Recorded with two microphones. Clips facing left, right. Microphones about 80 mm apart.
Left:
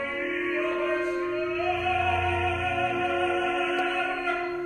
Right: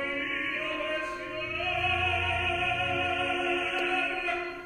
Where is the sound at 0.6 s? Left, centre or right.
Left.